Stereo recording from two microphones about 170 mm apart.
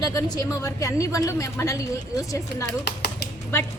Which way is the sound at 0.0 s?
20° left (ahead or behind).